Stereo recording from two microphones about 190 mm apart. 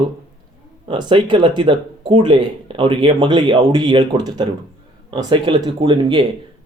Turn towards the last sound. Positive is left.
turn(degrees=-25)  # may be behind; listen again after turning